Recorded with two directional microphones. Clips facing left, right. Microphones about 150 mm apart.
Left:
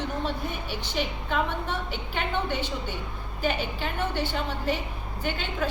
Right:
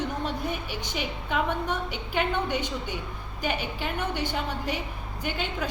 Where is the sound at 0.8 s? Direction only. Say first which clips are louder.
Left 2 dB; 10° right (ahead or behind).